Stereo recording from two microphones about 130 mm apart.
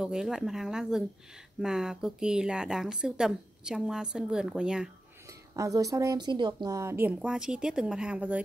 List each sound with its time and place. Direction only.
0.0 s speech: 5° right (ahead or behind)
5.6 s speech: 25° right (ahead or behind)
6.8 s speech: 20° right (ahead or behind)